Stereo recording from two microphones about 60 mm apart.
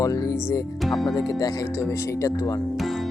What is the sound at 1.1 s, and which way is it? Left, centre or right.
Speech, left.